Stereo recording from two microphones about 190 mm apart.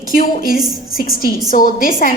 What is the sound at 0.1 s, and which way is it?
A woman's voice, 50° left (ahead or behind).